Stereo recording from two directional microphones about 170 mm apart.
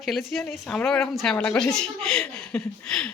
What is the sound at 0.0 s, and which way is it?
A woman's voice, centre (ahead or behind).